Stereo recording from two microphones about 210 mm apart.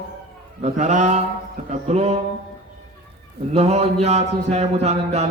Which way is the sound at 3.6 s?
30° right (ahead or behind).